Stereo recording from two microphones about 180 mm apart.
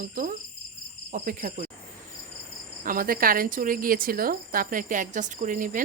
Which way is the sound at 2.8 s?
50° right (ahead or behind).